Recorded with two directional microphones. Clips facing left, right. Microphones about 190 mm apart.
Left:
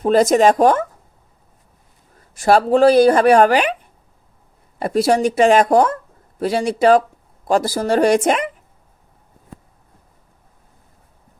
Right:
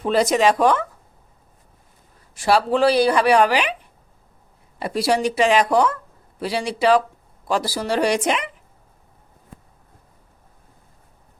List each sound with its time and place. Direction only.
0.0 s speech: 45° left (ahead or behind)
2.3 s speech: 45° left (ahead or behind)
4.8 s speech: 45° left (ahead or behind)